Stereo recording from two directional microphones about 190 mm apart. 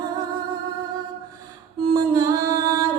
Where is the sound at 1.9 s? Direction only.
20° right (ahead or behind).